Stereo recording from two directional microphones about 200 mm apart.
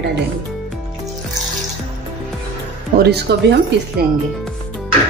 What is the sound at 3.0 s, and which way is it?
Speech, 55° right (ahead or behind).